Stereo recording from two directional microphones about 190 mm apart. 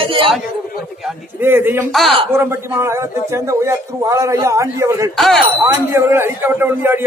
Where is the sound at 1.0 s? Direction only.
10° right (ahead or behind).